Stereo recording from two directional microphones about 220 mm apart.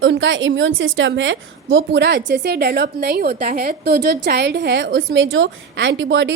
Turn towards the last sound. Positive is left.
turn(degrees=-55)  # may be behind; listen again after turning